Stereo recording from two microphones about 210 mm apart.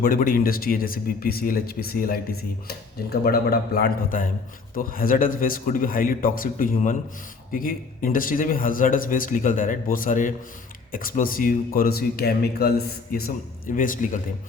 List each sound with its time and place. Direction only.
0.0 s speech: 40° left (ahead or behind)